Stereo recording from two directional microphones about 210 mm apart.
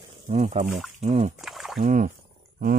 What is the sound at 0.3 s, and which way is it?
Speech, 30° right (ahead or behind).